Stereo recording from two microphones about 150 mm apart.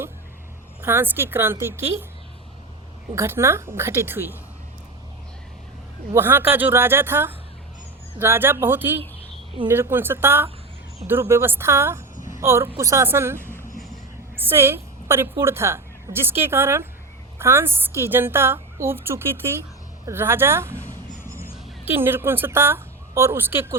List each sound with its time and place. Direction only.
0.8 s a woman's voice: 15° right (ahead or behind)
3.2 s a woman's voice: 15° right (ahead or behind)
6.1 s a woman's voice: 15° right (ahead or behind)
20.1 s a sound: 15° right (ahead or behind)
21.9 s a woman's voice: 15° right (ahead or behind)